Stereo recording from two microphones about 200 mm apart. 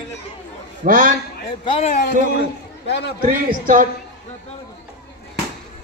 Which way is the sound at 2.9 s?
60° left (ahead or behind).